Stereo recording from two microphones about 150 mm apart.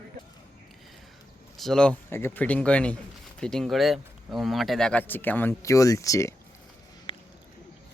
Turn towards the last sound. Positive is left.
turn(degrees=40)  # may be behind; listen again after turning